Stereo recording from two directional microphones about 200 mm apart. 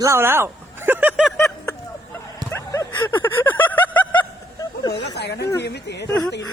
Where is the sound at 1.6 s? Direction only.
15° left (ahead or behind).